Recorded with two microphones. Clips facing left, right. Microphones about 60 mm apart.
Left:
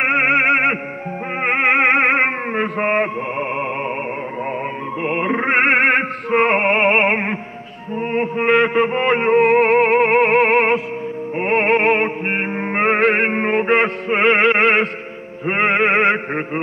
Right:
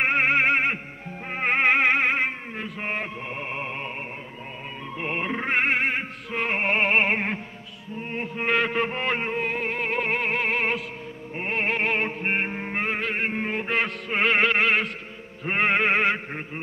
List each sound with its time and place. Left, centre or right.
0.0 s music: left
5.0 s music: left
7.9 s music: left